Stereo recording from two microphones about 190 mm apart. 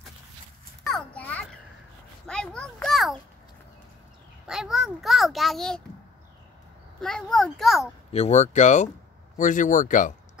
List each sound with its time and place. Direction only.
0.8 s children playing: 5° left (ahead or behind)
2.2 s a sound: 5° left (ahead or behind)
4.5 s a child's voice: 5° right (ahead or behind)
7.0 s a child's voice: 5° left (ahead or behind)
8.1 s speech: 35° left (ahead or behind)